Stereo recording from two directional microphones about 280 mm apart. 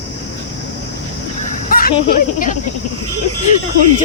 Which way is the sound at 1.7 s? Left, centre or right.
Left.